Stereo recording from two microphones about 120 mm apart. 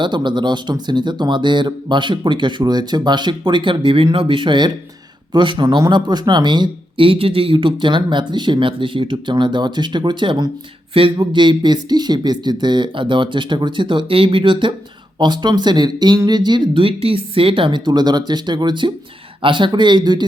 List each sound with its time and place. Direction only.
0.0 s speech: 40° right (ahead or behind)